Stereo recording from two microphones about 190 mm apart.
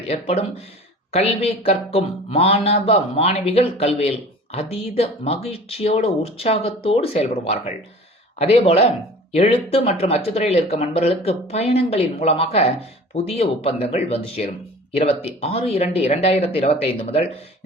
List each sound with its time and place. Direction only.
0.1 s speech: 35° left (ahead or behind)